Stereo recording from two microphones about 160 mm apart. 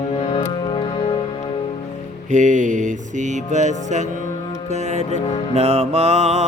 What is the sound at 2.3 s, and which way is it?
Music, 50° right (ahead or behind).